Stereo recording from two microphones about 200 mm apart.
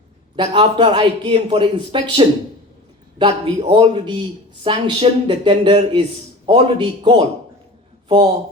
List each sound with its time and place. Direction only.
0.3 s a man's voice: 25° right (ahead or behind)